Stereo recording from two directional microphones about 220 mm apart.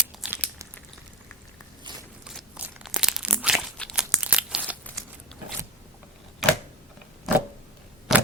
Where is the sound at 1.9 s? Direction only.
20° right (ahead or behind).